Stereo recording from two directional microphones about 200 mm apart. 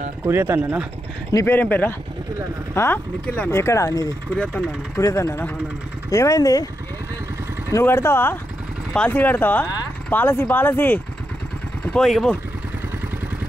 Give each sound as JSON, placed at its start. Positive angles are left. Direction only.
{"t": 0.2, "sound": "speech", "side_deg": -10}
{"t": 1.3, "sound": "speech", "side_deg": 10}
{"t": 7.7, "sound": "speech", "side_deg": 15}